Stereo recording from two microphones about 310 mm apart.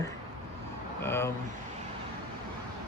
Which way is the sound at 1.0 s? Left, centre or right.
Centre.